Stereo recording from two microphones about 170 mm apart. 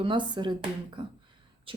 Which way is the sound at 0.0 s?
30° right (ahead or behind).